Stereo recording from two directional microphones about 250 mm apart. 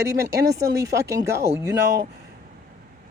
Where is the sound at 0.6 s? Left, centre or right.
Centre.